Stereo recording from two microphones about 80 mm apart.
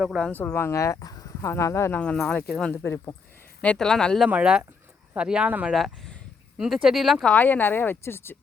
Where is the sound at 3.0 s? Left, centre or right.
Left.